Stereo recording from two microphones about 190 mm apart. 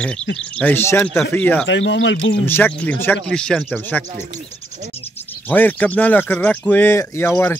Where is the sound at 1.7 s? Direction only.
70° left (ahead or behind).